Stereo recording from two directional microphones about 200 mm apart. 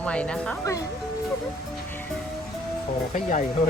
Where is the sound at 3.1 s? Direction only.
35° left (ahead or behind).